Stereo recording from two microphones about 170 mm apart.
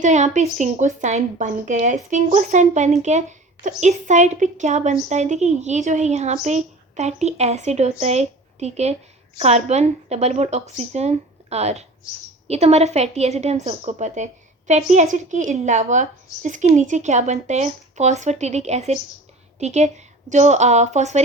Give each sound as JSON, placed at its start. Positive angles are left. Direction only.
{"t": 0.0, "sound": "a woman's voice", "side_deg": -45}